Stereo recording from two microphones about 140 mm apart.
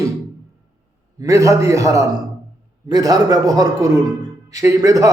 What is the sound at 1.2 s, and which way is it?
Speech, 20° right (ahead or behind).